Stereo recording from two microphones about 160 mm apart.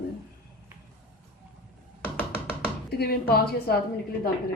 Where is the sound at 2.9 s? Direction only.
80° left.